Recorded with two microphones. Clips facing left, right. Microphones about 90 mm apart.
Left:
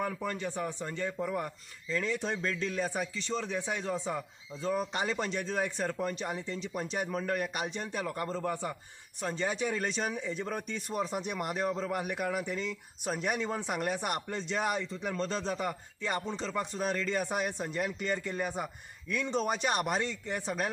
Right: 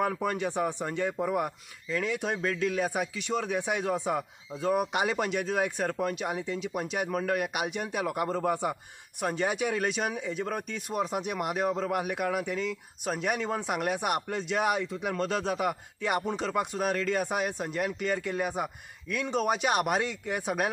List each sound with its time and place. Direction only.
0.2 s speech: 20° right (ahead or behind)